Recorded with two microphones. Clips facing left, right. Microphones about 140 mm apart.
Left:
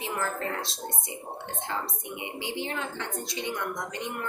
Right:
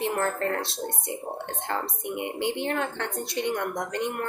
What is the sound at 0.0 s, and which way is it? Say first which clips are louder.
Speech: right 5 dB; 60° right (ahead or behind).